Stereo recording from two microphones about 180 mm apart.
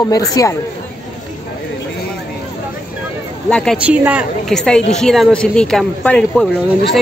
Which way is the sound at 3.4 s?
5° left (ahead or behind).